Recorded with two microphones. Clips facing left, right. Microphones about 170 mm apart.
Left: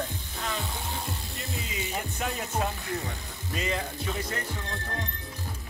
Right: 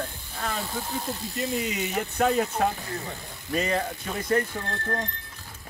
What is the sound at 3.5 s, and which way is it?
Speech, 50° right (ahead or behind).